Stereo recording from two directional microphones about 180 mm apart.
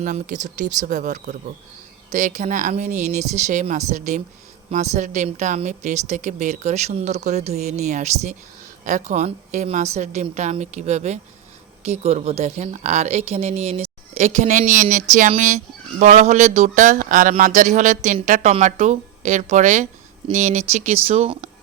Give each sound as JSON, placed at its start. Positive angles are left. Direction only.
{"t": 0.0, "sound": "a woman's voice", "side_deg": -45}